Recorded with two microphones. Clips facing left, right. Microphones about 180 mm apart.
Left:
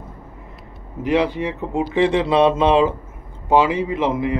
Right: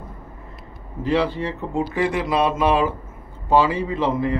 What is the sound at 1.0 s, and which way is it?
A man's voice, 15° left (ahead or behind).